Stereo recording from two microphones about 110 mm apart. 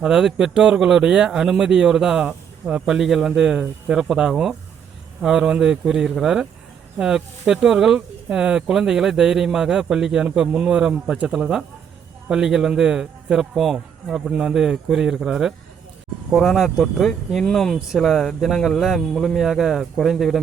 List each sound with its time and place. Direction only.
0.0 s speech: 5° right (ahead or behind)